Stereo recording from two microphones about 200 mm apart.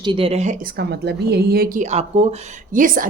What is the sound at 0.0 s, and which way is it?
Speech, 25° right (ahead or behind).